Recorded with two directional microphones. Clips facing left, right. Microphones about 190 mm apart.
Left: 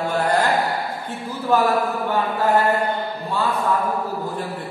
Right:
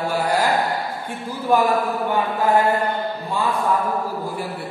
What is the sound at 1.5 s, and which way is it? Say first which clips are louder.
Speech: right 1 dB; 15° right (ahead or behind).